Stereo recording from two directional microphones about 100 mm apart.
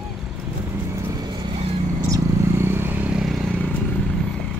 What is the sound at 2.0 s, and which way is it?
Vehicle, 30° right (ahead or behind).